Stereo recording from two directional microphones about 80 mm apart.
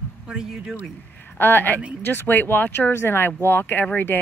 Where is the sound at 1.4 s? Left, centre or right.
Left.